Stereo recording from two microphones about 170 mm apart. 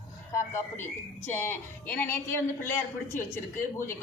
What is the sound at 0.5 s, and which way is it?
A woman's voice, 15° left (ahead or behind).